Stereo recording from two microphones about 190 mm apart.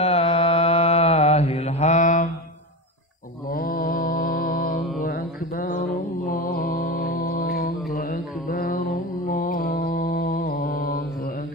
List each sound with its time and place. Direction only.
0.0 s mantra: 30° left (ahead or behind)
3.4 s mantra: 50° left (ahead or behind)